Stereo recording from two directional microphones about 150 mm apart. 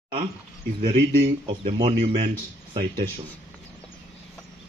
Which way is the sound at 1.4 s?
35° right (ahead or behind).